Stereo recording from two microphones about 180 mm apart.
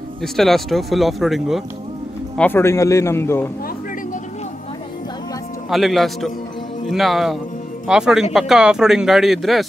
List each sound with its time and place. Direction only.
0.2 s speech: centre (ahead or behind)
2.3 s a man's voice: 10° left (ahead or behind)
5.7 s speech: centre (ahead or behind)